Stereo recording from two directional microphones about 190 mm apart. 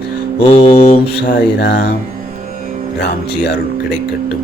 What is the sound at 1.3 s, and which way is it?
Speech, 60° left (ahead or behind).